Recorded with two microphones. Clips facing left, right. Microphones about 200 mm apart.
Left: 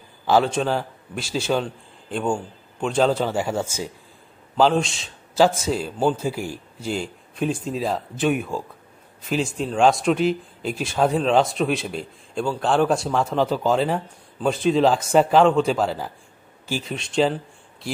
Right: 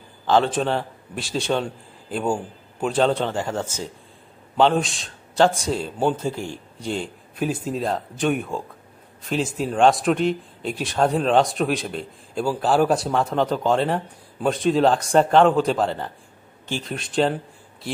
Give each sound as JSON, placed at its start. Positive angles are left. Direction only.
{"t": 0.3, "sound": "a man's voice", "side_deg": 0}